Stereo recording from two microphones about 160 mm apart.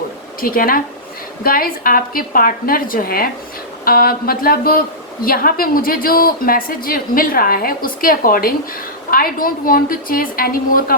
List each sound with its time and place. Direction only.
0.4 s a woman's voice: 65° left (ahead or behind)